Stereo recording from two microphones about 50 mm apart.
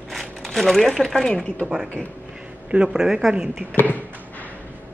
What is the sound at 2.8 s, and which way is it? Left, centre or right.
Speech, centre.